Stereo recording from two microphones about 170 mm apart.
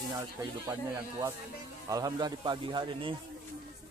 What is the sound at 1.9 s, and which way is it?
A man's voice, 20° right (ahead or behind).